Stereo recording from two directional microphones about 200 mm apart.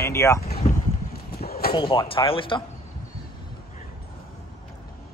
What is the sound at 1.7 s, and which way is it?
Speech, 25° left (ahead or behind).